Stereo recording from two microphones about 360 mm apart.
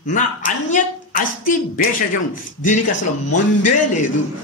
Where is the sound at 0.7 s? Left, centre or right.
Left.